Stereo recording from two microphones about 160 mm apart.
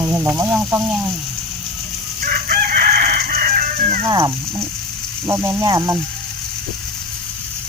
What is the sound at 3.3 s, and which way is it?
Chicken, 60° right (ahead or behind).